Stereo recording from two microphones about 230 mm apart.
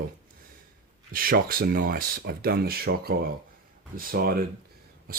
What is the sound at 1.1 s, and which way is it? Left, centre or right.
Speech, right.